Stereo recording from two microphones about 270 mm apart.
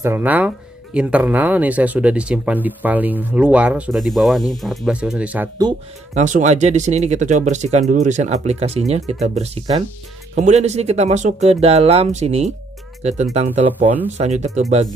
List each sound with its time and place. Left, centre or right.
0.0 s speech: centre
6.1 s speech: right